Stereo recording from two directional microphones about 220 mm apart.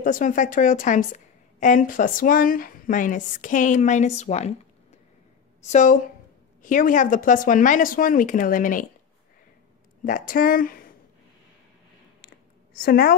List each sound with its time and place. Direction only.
0.0 s a woman's voice: 35° left (ahead or behind)
5.7 s a woman's voice: 35° left (ahead or behind)
10.0 s a woman's voice: 40° left (ahead or behind)
12.7 s a woman's voice: 40° left (ahead or behind)